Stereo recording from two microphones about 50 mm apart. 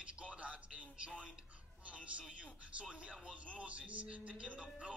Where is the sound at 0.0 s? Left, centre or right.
Right.